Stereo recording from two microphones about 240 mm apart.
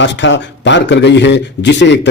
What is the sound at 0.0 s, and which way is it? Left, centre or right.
Speech, left.